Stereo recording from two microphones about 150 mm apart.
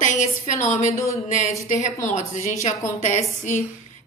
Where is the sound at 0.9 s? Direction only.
20° left (ahead or behind).